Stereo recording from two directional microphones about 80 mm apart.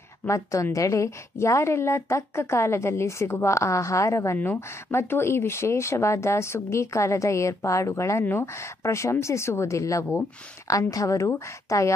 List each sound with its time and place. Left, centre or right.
0.3 s speech: left